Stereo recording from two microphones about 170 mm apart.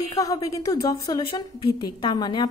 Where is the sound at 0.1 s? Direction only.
20° left (ahead or behind).